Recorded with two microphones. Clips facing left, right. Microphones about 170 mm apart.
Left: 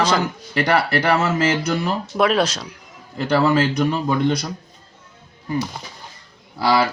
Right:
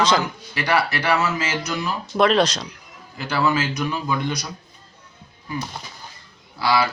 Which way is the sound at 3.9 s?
60° left (ahead or behind).